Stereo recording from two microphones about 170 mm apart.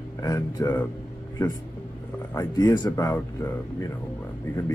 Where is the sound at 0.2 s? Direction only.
20° left (ahead or behind).